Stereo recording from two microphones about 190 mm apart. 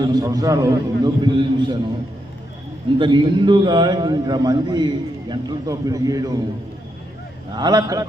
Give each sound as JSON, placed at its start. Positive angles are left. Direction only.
{"t": 0.0, "sound": "a man's voice", "side_deg": -20}
{"t": 3.0, "sound": "a man's voice", "side_deg": -25}
{"t": 7.5, "sound": "a man's voice", "side_deg": -20}